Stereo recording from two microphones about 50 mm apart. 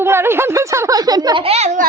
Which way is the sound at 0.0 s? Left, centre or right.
Right.